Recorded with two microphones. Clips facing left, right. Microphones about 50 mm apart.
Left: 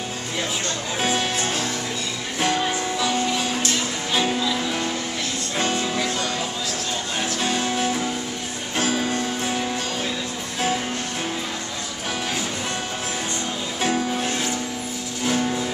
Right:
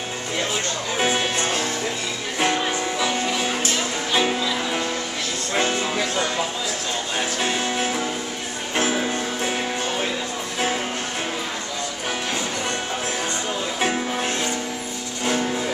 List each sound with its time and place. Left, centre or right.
0.9 s music: centre
13.7 s music: centre